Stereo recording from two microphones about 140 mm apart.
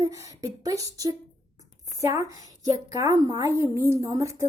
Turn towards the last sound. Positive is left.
turn(degrees=-25)  # may be behind; listen again after turning